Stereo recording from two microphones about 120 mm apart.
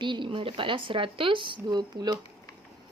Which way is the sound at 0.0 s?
40° right (ahead or behind).